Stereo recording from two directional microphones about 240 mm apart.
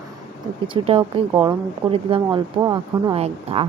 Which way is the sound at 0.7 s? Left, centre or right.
Right.